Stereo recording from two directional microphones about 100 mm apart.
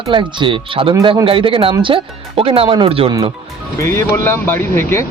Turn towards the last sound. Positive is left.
turn(degrees=25)  # may be behind; listen again after turning